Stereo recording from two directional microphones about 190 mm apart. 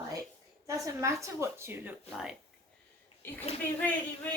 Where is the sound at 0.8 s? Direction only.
15° right (ahead or behind).